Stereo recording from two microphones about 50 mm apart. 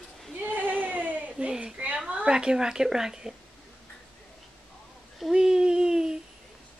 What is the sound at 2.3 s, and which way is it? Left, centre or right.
Speech, centre.